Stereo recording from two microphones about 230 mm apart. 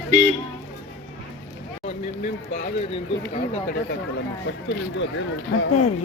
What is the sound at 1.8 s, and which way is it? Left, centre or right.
Speech, left.